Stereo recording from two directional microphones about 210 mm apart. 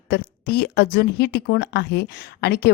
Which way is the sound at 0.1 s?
50° left (ahead or behind).